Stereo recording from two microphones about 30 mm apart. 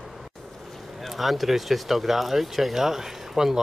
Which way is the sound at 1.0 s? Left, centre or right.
Centre.